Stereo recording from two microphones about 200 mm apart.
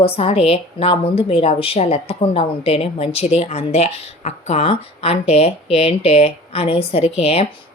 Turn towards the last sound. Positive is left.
turn(degrees=30)  # may be behind; listen again after turning